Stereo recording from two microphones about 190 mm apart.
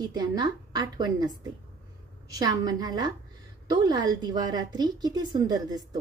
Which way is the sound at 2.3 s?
20° right (ahead or behind).